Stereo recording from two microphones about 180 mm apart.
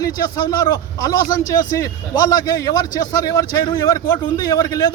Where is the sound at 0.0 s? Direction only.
20° left (ahead or behind).